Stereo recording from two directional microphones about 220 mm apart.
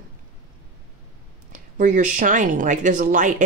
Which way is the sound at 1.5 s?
35° right (ahead or behind).